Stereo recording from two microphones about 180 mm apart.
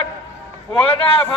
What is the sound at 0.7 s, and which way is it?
Speech, 30° left (ahead or behind).